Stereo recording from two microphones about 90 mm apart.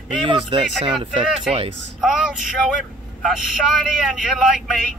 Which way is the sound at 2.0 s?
5° right (ahead or behind).